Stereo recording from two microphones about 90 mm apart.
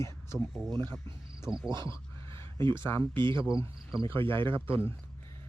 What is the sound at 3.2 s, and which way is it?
Speech, 65° right (ahead or behind).